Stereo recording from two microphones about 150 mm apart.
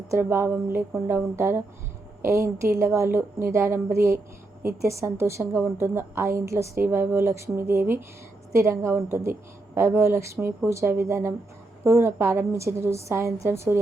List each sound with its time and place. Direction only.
0.1 s a woman's voice: 15° right (ahead or behind)